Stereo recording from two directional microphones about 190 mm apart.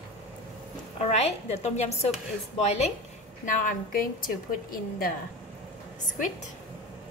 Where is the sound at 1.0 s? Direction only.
35° left (ahead or behind).